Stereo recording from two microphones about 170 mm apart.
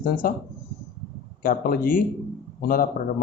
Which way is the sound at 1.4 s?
60° left (ahead or behind).